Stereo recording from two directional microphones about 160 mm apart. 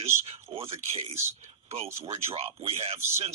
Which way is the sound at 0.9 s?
45° right (ahead or behind).